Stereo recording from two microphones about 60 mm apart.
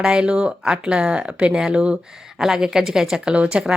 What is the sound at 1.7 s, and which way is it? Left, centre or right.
Speech, centre.